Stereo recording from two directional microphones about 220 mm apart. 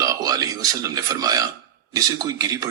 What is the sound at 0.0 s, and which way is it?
A man's voice, 15° right (ahead or behind).